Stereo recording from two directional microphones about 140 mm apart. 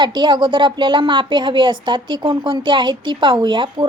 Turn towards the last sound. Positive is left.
turn(degrees=-35)  # may be behind; listen again after turning